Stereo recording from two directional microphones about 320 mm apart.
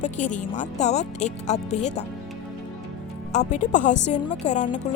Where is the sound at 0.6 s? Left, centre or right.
Left.